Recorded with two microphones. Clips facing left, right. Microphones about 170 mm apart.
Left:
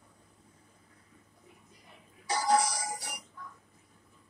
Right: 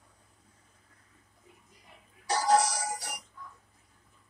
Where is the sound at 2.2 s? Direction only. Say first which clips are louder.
Right 2 dB; 80° right.